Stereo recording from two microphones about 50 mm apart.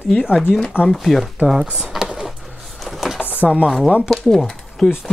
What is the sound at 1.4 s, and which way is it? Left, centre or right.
Speech, centre.